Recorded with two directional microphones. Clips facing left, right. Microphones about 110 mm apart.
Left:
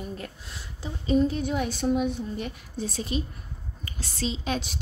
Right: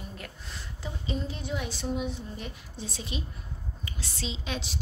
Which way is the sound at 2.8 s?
45° left (ahead or behind).